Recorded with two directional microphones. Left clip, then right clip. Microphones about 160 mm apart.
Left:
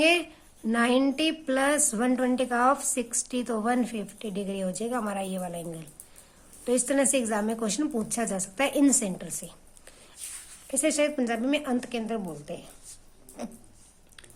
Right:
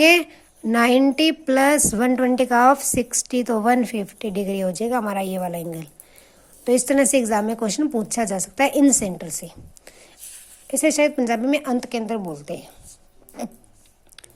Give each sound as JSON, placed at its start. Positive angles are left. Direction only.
{"t": 0.0, "sound": "a woman's voice", "side_deg": -40}